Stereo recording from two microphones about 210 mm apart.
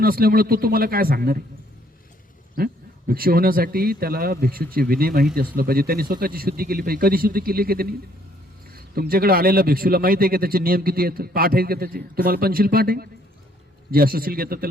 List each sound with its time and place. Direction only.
0.0 s speech: 45° right (ahead or behind)
3.1 s speech: 45° right (ahead or behind)